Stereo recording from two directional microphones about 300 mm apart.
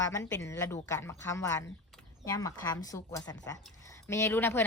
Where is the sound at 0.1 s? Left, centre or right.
Centre.